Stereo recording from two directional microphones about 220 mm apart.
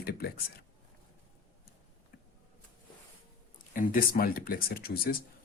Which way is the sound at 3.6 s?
40° left (ahead or behind).